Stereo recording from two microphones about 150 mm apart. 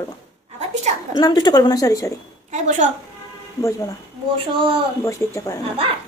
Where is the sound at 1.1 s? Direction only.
25° left (ahead or behind).